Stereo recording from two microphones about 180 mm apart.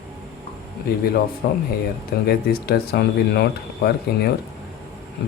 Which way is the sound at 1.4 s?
55° left (ahead or behind).